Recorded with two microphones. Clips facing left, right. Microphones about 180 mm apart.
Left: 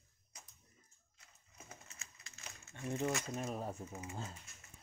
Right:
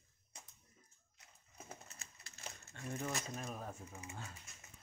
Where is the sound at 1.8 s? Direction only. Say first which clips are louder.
Right 1 dB; 35° right (ahead or behind).